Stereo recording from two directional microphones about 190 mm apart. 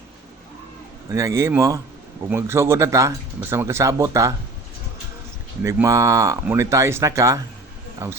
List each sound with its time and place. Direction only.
1.1 s speech: 15° right (ahead or behind)
5.6 s speech: 15° right (ahead or behind)